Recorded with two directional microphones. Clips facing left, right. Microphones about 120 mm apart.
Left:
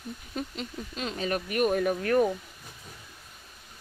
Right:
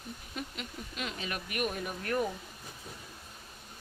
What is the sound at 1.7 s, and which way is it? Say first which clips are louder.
Speech: left 12 dB; 55° left (ahead or behind).